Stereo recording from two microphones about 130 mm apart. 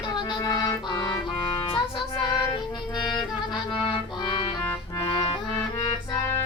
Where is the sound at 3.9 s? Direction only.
40° left (ahead or behind).